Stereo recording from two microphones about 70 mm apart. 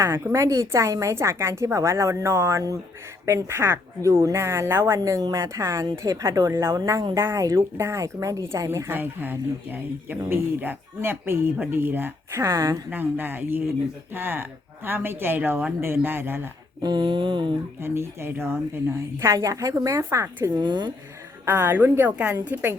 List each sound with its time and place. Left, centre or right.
0.3 s a woman's voice: right
4.9 s a woman's voice: right
6.5 s speech: right
6.7 s a woman's voice: right
7.8 s a woman's voice: right
8.9 s speech: right
12.4 s a woman's voice: right
12.9 s speech: right
16.8 s a sound: right
17.7 s a woman's voice: right
20.6 s a sound: right
21.4 s speech: right
22.1 s a woman's voice: centre